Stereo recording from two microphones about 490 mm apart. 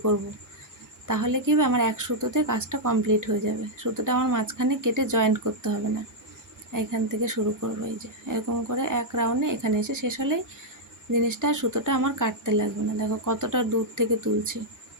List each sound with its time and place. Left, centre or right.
1.0 s speech: right
6.7 s speech: right